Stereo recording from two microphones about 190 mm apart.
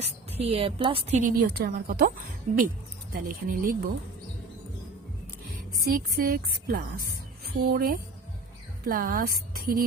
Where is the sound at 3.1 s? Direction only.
50° right (ahead or behind).